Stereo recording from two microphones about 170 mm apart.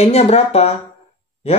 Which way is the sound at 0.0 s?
40° left (ahead or behind).